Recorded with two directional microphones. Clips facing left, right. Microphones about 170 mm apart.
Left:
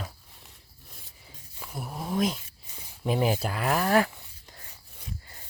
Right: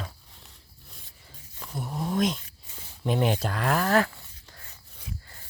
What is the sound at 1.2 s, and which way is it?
Cat, 10° left (ahead or behind).